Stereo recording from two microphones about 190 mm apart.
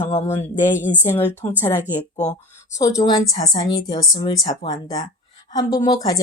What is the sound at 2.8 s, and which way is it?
A woman's voice, 15° left (ahead or behind).